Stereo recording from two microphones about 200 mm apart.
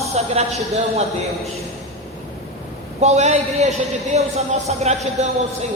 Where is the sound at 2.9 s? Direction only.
35° right (ahead or behind).